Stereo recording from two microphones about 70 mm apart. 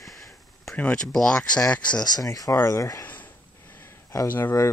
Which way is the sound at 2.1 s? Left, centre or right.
Left.